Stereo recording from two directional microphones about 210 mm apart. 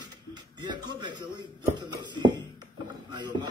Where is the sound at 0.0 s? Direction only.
20° right (ahead or behind).